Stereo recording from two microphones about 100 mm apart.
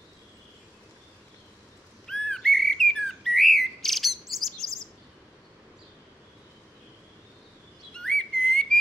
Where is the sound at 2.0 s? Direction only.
5° left (ahead or behind).